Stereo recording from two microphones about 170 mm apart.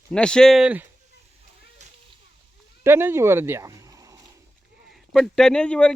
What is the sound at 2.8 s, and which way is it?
Speech, 15° right (ahead or behind).